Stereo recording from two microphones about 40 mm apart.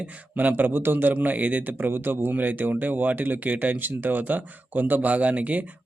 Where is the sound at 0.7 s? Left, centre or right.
Right.